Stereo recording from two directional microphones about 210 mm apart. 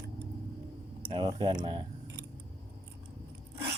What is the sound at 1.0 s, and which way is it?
Speech, 20° right (ahead or behind).